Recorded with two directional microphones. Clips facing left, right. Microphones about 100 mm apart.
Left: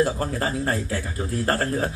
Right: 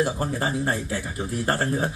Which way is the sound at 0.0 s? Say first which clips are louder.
Left 1 dB; 25° right (ahead or behind).